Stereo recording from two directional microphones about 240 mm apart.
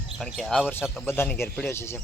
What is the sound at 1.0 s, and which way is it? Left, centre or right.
Speech, centre.